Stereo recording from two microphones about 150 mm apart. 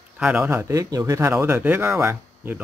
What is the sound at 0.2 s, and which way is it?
Speech, 10° right (ahead or behind).